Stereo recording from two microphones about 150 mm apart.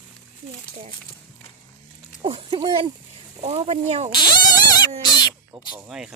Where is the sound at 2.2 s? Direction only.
40° right (ahead or behind).